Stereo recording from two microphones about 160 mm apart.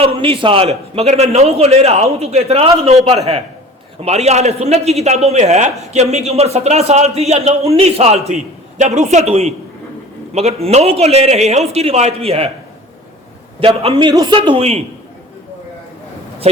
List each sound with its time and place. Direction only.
0.0 s a man's voice: 35° right (ahead or behind)
13.6 s a man's voice: 35° right (ahead or behind)